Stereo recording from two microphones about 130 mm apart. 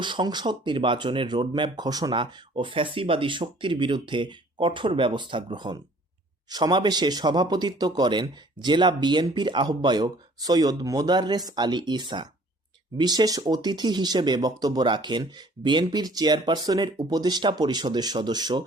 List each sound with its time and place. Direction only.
0.0 s speech: 35° right (ahead or behind)